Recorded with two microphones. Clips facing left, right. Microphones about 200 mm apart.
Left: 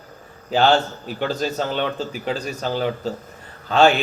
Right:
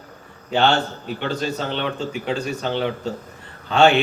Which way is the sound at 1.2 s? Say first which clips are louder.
Left 2 dB; 40° left (ahead or behind).